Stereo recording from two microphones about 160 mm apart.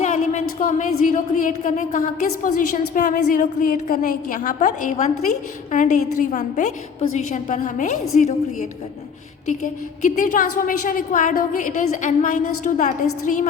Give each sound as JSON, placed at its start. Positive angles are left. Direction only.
{"t": 0.0, "sound": "a woman's voice", "side_deg": 50}
{"t": 10.0, "sound": "a woman's voice", "side_deg": 55}